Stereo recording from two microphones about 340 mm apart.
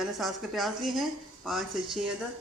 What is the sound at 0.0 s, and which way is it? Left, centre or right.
Speech, centre.